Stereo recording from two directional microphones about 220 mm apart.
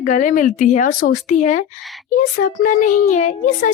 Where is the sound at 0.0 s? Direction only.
35° left (ahead or behind).